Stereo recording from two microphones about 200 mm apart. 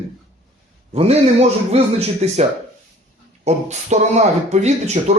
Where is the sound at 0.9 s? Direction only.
30° right (ahead or behind).